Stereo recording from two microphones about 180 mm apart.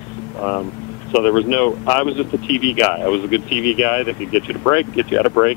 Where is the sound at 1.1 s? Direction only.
15° left (ahead or behind).